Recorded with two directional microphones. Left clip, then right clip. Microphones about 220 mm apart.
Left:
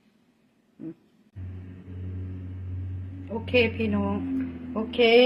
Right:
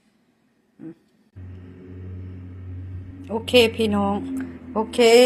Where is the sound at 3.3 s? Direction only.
40° right (ahead or behind).